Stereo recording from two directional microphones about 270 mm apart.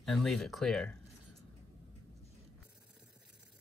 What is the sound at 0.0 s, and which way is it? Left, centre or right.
Speech, centre.